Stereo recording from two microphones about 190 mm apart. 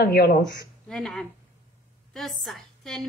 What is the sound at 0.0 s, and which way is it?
Speech, 55° left (ahead or behind).